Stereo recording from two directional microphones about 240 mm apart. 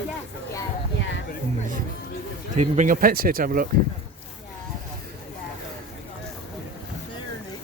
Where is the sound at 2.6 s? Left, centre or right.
Right.